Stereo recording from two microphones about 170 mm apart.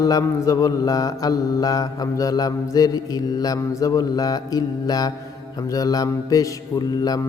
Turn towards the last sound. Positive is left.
turn(degrees=20)  # may be behind; listen again after turning